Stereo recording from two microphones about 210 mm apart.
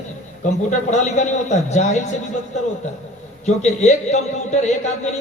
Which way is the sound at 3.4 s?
35° left (ahead or behind).